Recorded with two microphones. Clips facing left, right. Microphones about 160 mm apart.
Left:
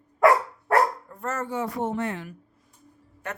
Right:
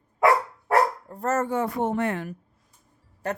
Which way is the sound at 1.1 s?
40° right (ahead or behind).